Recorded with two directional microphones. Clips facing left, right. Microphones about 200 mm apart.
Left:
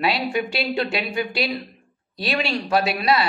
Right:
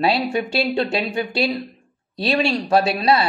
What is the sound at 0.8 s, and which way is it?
Speech, 35° right (ahead or behind).